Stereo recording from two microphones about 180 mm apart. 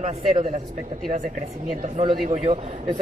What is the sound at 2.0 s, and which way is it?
Speech, 35° right (ahead or behind).